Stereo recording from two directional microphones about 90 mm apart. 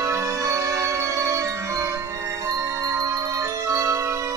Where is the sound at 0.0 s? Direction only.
35° right (ahead or behind).